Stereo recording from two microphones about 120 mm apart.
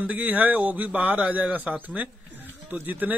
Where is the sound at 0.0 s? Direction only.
10° right (ahead or behind).